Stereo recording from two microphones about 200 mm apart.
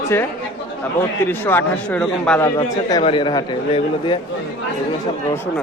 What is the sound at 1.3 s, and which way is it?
Speech, 10° left (ahead or behind).